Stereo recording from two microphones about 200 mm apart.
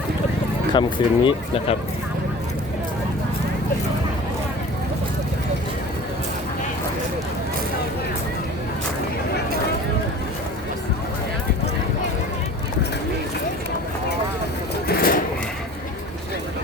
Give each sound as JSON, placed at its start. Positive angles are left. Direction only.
{"t": 0.7, "sound": "speech", "side_deg": 25}
{"t": 14.8, "sound": "bird", "side_deg": 45}